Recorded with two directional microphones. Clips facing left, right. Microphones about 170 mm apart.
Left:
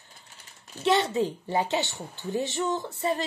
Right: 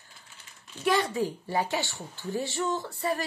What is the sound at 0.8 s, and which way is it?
A woman's voice, 25° left (ahead or behind).